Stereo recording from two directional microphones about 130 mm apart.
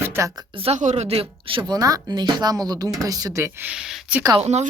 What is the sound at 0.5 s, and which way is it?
Speech, 45° right (ahead or behind).